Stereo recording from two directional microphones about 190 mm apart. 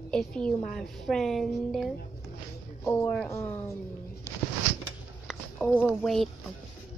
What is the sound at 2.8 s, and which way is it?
Speech, 15° left (ahead or behind).